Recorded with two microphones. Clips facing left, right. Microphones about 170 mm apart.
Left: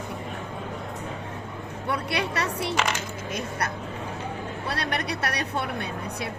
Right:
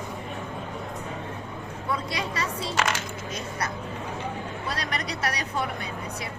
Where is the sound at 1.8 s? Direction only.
70° left (ahead or behind).